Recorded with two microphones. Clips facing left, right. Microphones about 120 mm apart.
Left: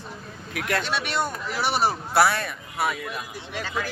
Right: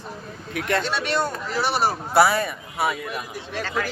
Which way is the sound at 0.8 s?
15° left (ahead or behind).